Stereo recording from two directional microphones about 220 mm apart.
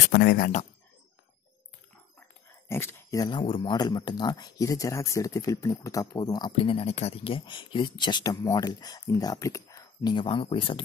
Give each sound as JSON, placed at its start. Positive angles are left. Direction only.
{"t": 0.1, "sound": "speech", "side_deg": 50}
{"t": 2.7, "sound": "speech", "side_deg": 10}